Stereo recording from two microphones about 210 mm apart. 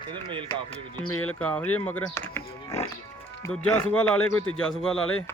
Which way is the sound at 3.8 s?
5° left (ahead or behind).